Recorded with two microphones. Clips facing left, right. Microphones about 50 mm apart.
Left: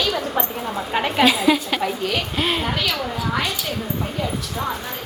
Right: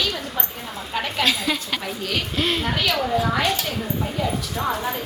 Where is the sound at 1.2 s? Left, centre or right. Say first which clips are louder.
Left 7 dB; centre.